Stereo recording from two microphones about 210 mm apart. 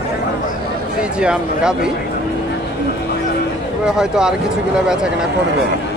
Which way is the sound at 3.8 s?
5° right (ahead or behind).